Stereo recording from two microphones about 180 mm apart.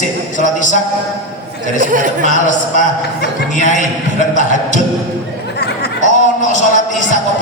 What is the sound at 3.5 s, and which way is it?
A man's voice, 45° left (ahead or behind).